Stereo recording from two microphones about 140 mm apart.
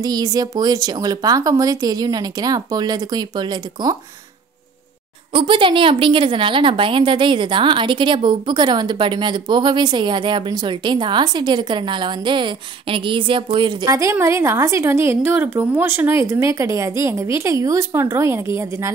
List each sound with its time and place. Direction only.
0.0 s a woman's voice: 25° right (ahead or behind)
5.3 s a woman's voice: 35° right (ahead or behind)
13.8 s a woman's voice: 20° right (ahead or behind)